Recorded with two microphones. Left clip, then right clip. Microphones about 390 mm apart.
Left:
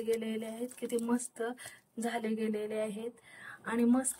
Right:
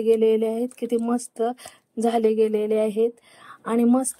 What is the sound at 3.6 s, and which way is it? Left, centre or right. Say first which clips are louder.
Speech: right 10 dB; centre.